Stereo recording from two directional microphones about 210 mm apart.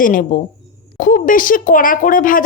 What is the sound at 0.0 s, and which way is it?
Speech, 40° left (ahead or behind).